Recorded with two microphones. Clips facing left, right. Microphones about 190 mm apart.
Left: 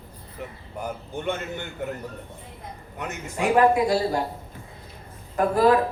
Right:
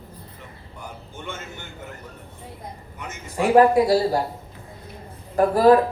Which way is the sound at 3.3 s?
35° right (ahead or behind).